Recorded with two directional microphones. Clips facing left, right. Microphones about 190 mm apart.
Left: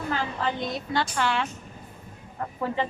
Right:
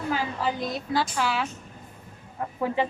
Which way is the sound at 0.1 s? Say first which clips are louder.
Right 1 dB; 5° right (ahead or behind).